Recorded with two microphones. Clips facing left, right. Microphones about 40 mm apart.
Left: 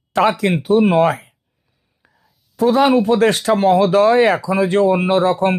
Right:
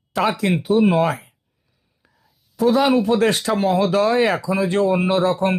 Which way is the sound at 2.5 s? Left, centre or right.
Left.